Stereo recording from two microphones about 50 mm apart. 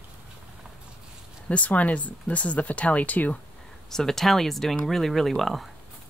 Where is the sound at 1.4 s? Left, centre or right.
Left.